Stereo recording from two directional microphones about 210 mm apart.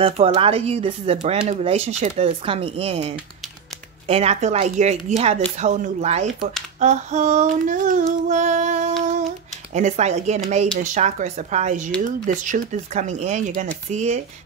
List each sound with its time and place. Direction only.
0.0 s speech: 25° right (ahead or behind)
6.8 s female singing: 35° right (ahead or behind)
9.8 s speech: 35° right (ahead or behind)